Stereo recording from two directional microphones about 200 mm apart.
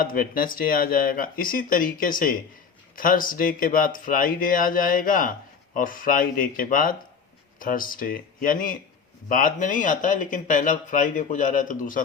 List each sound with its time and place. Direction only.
0.0 s speech: 45° left (ahead or behind)